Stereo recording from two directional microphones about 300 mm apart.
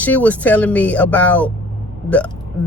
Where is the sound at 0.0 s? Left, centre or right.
Centre.